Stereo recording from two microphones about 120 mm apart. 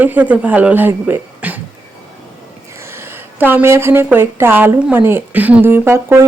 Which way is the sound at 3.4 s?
15° right (ahead or behind).